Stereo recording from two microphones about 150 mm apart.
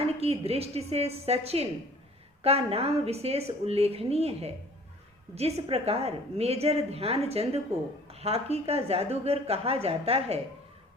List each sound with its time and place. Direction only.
0.0 s a woman's voice: 40° right (ahead or behind)